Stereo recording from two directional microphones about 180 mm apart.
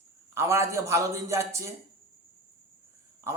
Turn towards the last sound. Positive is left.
turn(degrees=-15)  # may be behind; listen again after turning